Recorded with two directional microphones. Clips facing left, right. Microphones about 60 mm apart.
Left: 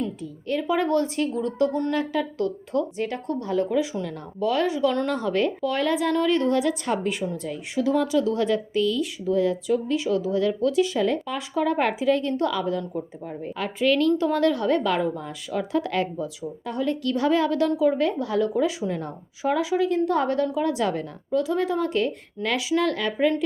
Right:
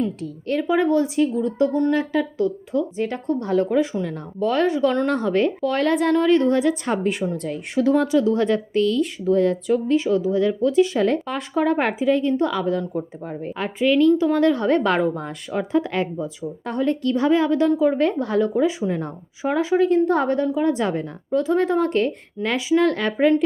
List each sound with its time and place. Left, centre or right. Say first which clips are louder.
0.7 s speech: right 4 dB; centre
3.4 s a woman's voice: right 4 dB; right
6.2 s a woman's voice: right 4 dB; right
7.2 s a woman's voice: right 4 dB; right
10.9 s a woman's voice: right 3 dB; right
13.7 s a woman's voice: right 4 dB; centre
14.3 s a woman's voice: right 3 dB; right
15.5 s speech: right 3 dB; right
16.6 s speech: right 4 dB; right
17.7 s a woman's voice: right 3 dB; right
21.4 s speech: right 8 dB; right
22.4 s a woman's voice: right 4 dB; right